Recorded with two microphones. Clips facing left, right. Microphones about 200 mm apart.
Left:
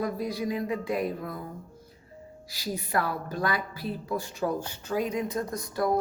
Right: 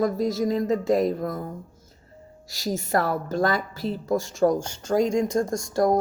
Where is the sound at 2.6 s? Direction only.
45° right (ahead or behind).